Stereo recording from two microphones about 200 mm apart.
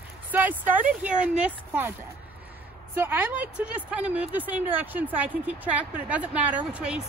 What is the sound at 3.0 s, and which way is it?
A woman's voice, 10° right (ahead or behind).